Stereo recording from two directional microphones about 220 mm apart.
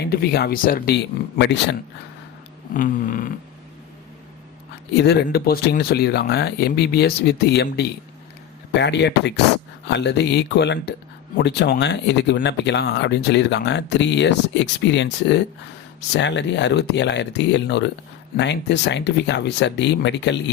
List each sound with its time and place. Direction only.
0.0 s speech: 45° left (ahead or behind)
2.7 s cat: 35° left (ahead or behind)
4.9 s speech: 50° left (ahead or behind)